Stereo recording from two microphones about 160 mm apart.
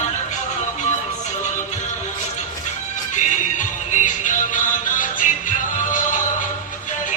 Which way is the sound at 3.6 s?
50° left (ahead or behind).